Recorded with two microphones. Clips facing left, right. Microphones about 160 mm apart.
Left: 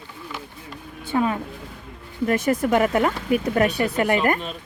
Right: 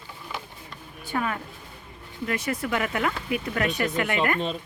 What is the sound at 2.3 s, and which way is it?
Speech, 45° left (ahead or behind).